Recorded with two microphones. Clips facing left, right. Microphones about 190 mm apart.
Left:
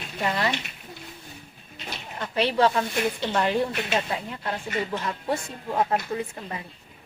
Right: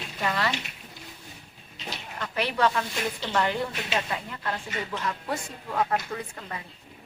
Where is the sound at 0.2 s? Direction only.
20° left (ahead or behind).